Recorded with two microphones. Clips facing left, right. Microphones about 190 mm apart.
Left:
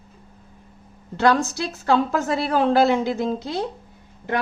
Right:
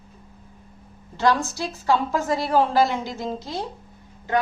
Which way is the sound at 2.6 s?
60° left (ahead or behind).